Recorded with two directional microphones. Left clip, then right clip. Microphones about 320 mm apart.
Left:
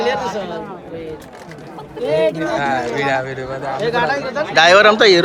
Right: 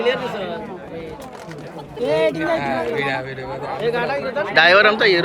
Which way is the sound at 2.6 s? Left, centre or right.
Left.